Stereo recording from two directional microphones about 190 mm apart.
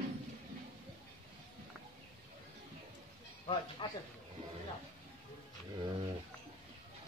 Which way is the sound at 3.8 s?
25° left (ahead or behind).